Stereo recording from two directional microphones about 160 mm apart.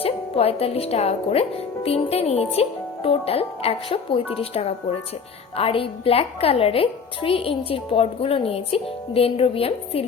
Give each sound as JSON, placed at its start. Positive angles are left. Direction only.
{"t": 0.0, "sound": "speech", "side_deg": 40}